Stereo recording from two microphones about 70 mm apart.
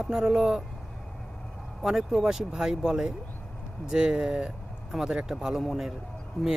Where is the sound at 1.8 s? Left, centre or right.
Centre.